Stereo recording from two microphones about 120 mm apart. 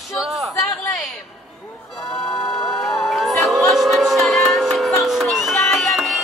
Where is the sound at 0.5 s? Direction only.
25° left (ahead or behind).